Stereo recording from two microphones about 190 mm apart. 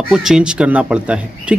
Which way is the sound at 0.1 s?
Centre (ahead or behind).